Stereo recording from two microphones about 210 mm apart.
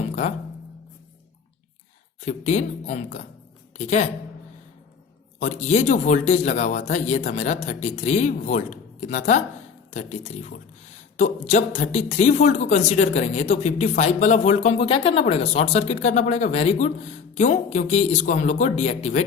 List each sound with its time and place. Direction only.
2.2 s speech: 35° left (ahead or behind)
5.4 s speech: 35° left (ahead or behind)